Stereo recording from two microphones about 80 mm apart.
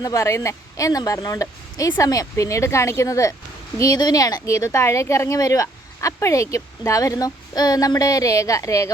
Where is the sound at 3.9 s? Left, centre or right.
Left.